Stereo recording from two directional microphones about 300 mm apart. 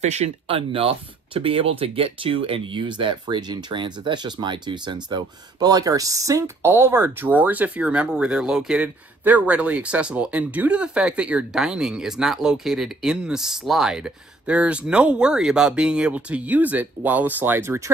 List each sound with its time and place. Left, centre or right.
0.0 s speech: right